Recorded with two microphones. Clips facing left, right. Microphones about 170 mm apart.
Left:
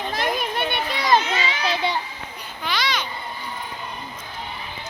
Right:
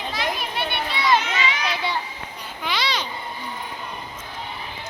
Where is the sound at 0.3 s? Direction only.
50° left (ahead or behind); by 2.0 s 25° left (ahead or behind).